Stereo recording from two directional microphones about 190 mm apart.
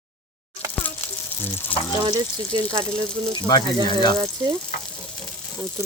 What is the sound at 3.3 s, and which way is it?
Speech, 25° left (ahead or behind).